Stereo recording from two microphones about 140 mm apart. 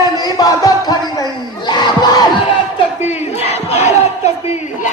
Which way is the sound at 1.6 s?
30° left (ahead or behind).